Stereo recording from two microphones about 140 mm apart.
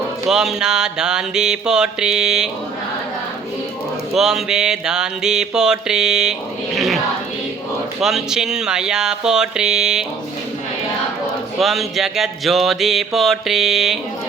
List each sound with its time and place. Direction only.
0.3 s mantra: 5° right (ahead or behind)
4.1 s mantra: 5° right (ahead or behind)
8.0 s mantra: 5° right (ahead or behind)
11.6 s mantra: centre (ahead or behind)